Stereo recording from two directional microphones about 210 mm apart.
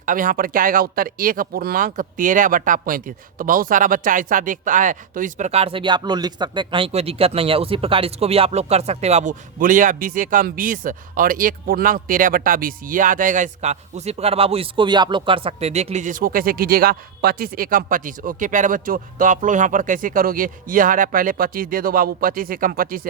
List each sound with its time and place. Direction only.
0.0 s speech: 40° right (ahead or behind)